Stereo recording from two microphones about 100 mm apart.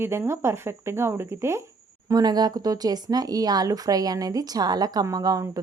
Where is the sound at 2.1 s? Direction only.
40° right (ahead or behind).